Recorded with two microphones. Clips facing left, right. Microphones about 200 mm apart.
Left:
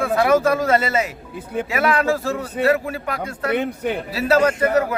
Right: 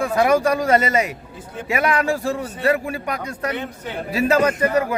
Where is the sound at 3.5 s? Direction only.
60° left (ahead or behind).